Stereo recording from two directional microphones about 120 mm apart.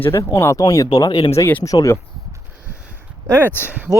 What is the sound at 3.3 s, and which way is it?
Speech, 20° right (ahead or behind).